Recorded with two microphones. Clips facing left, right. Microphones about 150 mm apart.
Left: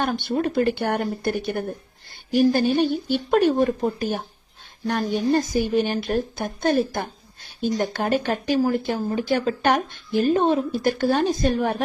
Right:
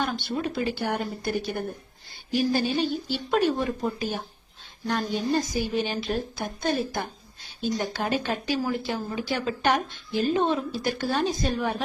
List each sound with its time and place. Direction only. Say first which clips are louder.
0.0 s speech: left 5 dB; 55° left (ahead or behind)